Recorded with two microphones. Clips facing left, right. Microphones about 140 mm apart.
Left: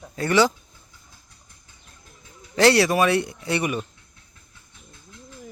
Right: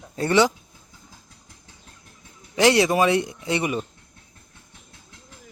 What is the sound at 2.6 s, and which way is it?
Speech, 15° right (ahead or behind).